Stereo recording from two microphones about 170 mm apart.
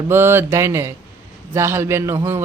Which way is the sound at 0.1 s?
15° right (ahead or behind).